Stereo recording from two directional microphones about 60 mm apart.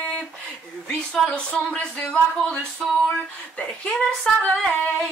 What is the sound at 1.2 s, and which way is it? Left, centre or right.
Female singing, centre.